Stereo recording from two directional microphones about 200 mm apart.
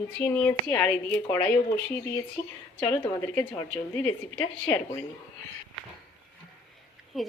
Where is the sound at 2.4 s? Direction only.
35° left (ahead or behind).